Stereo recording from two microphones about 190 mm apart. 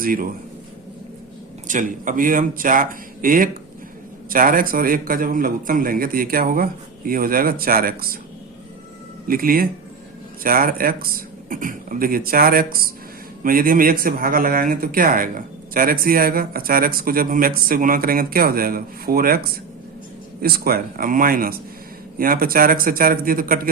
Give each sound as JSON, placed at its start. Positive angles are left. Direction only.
{"t": 0.0, "sound": "a man's voice", "side_deg": -50}
{"t": 1.6, "sound": "a man's voice", "side_deg": -40}
{"t": 9.2, "sound": "a man's voice", "side_deg": -50}